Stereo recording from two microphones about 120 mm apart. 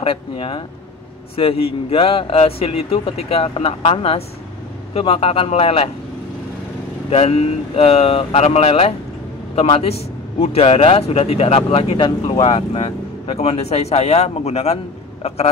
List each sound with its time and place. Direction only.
0.0 s speech: 50° left (ahead or behind)
7.1 s a man's voice: 55° left (ahead or behind)